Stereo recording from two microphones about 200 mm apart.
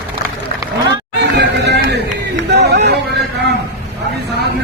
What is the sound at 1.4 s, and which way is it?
Music, 55° right (ahead or behind).